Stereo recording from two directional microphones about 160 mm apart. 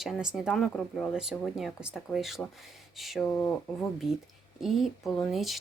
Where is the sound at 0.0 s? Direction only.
5° right (ahead or behind).